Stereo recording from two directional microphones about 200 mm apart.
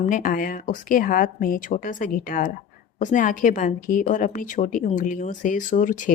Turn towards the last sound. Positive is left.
turn(degrees=40)  # may be behind; listen again after turning